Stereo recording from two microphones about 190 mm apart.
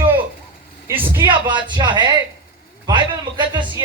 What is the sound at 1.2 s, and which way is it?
A man's voice, 25° right (ahead or behind).